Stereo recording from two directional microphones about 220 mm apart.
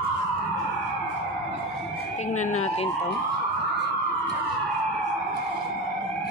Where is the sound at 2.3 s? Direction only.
30° left (ahead or behind).